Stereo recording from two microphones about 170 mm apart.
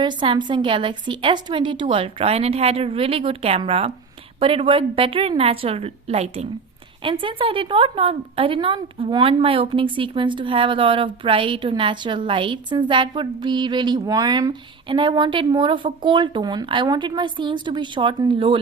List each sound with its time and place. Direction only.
0.0 s a woman's voice: 25° right (ahead or behind)